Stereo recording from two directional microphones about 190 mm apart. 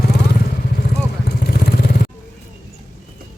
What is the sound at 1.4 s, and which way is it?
Vehicle, 55° left (ahead or behind).